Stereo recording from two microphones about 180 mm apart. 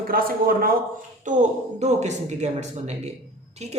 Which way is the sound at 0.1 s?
55° right (ahead or behind).